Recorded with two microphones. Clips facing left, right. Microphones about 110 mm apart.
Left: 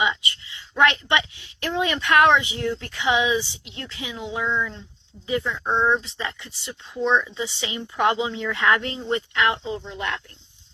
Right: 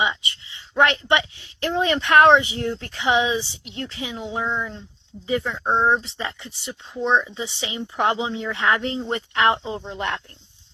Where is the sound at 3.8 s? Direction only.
35° right (ahead or behind).